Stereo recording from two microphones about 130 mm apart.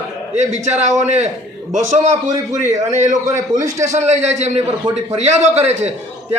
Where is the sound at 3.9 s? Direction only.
65° right (ahead or behind).